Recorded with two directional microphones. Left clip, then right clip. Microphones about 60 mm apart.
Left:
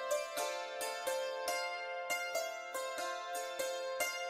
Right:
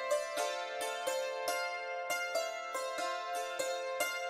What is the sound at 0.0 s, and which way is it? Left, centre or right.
Music, left.